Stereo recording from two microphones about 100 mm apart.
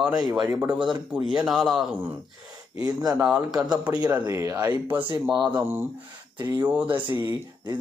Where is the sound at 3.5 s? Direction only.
5° right (ahead or behind).